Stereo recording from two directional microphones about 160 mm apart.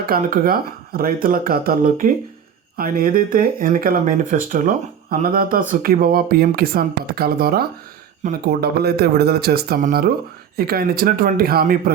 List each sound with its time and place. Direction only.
0.1 s speech: 65° right (ahead or behind)
8.4 s speech: 85° right; by 11.8 s 65° right (ahead or behind)